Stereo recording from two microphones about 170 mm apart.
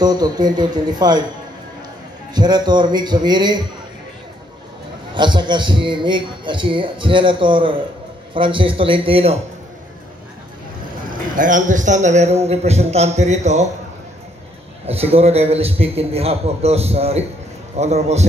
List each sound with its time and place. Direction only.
0.0 s a man's voice: 25° right (ahead or behind)
2.3 s a man's voice: 25° right (ahead or behind)
5.1 s a man's voice: 25° right (ahead or behind)
11.3 s a man's voice: 50° right (ahead or behind)
14.9 s a man's voice: 35° right (ahead or behind)